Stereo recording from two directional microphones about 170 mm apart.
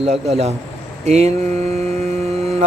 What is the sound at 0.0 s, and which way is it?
Mantra, 40° right (ahead or behind).